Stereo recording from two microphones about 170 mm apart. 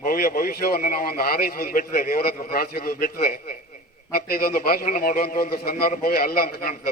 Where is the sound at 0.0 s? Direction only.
60° left (ahead or behind).